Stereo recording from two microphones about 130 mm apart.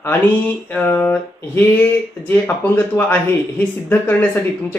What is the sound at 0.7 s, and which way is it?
A man's voice, 15° left (ahead or behind).